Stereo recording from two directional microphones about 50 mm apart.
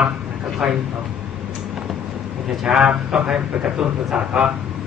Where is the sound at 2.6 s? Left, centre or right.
Centre.